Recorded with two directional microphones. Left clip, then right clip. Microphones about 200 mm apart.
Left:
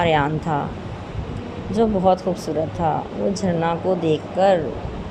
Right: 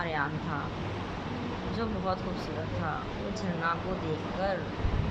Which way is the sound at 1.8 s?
30° left (ahead or behind).